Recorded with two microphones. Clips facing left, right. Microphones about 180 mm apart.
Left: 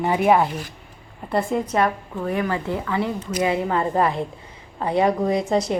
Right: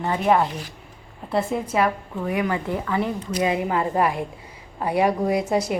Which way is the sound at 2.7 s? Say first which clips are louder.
Even; 20° left (ahead or behind).